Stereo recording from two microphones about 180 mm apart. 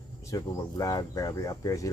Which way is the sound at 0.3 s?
20° left (ahead or behind).